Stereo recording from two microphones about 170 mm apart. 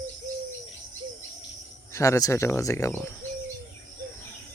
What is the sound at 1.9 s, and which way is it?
Speech, 20° left (ahead or behind).